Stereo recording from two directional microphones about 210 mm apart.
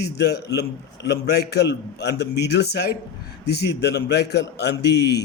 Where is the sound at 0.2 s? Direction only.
50° left (ahead or behind).